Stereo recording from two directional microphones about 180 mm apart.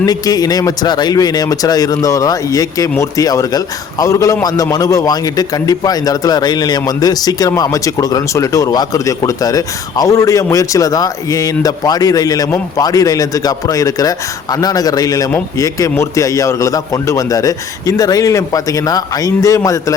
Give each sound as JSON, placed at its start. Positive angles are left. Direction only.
{"t": 0.0, "sound": "speech", "side_deg": 20}